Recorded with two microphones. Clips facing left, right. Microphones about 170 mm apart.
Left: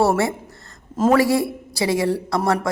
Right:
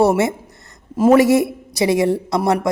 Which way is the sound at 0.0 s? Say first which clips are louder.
Right 3 dB; 20° right (ahead or behind).